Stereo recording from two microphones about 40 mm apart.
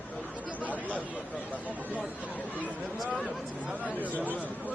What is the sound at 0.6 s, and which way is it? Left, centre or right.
Chatter, left.